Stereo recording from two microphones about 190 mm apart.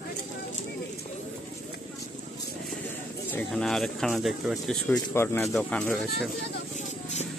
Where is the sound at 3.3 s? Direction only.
5° left (ahead or behind).